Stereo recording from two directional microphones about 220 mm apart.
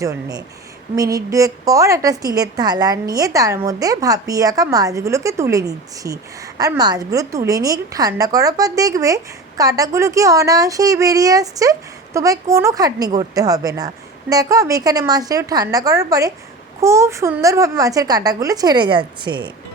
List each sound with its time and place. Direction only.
0.0 s a woman's voice: 15° right (ahead or behind)